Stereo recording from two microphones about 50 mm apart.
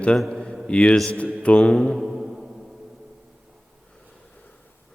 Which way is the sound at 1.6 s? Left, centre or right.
Centre.